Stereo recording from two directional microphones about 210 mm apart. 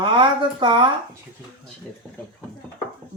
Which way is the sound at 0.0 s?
20° right (ahead or behind).